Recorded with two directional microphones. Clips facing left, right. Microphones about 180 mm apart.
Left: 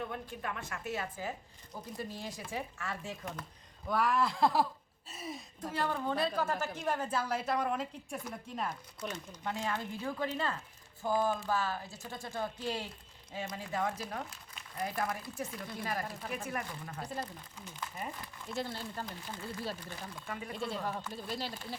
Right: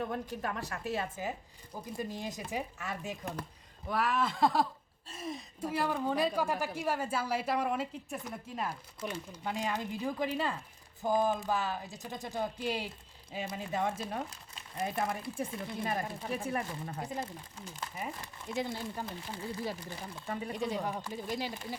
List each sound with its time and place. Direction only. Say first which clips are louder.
0.1 s speech: right 4 dB; 40° right (ahead or behind); by 3.2 s 15° right (ahead or behind)
3.8 s speech: left 1 dB; centre (ahead or behind)
5.5 s a woman's voice: right 2 dB; 10° right (ahead or behind); by 17.2 s 25° right (ahead or behind)
17.9 s a woman's voice: right 2 dB; 10° right (ahead or behind)
20.1 s speech: right 6 dB; 30° right (ahead or behind)
20.5 s a woman's voice: right 2 dB; 15° right (ahead or behind)